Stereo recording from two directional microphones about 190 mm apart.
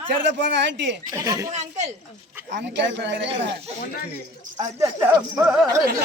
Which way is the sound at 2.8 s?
70° right (ahead or behind).